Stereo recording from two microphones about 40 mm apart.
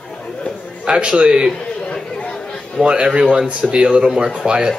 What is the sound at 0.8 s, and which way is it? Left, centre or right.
Speech, right.